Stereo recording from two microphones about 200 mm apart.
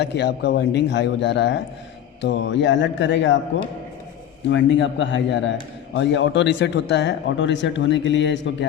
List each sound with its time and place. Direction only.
0.0 s a man's voice: 55° left (ahead or behind)
4.4 s a man's voice: 65° left (ahead or behind)